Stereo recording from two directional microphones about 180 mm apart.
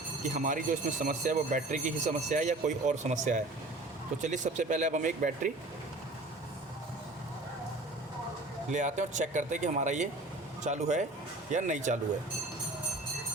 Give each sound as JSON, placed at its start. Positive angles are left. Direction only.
{"t": 0.3, "sound": "speech", "side_deg": -45}
{"t": 8.7, "sound": "speech", "side_deg": -45}